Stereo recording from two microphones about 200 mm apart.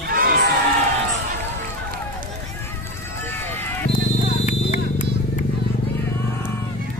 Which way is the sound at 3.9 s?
40° left (ahead or behind).